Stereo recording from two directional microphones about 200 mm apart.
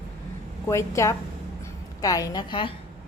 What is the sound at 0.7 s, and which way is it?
A woman's voice, 15° left (ahead or behind).